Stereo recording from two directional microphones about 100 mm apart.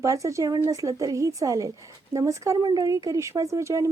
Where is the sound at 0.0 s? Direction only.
35° right (ahead or behind).